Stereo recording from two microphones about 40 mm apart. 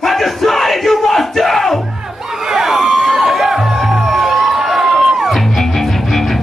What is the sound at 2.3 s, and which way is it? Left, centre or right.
Music, centre.